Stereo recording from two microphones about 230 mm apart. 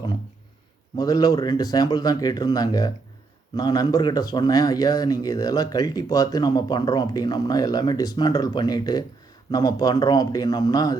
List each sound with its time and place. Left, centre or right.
0.9 s speech: centre